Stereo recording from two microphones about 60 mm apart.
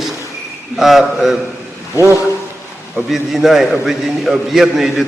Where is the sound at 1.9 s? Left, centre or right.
Right.